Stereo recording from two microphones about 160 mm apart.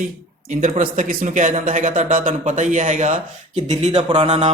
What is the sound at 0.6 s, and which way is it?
Speech, 55° right (ahead or behind).